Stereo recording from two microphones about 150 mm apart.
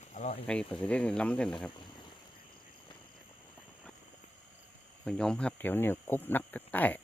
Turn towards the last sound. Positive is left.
turn(degrees=10)  # may be behind; listen again after turning